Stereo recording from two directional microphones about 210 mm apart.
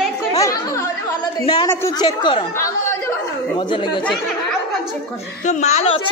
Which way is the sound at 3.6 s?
20° left (ahead or behind).